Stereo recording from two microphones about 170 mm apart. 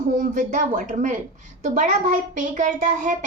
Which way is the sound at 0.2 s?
50° right (ahead or behind).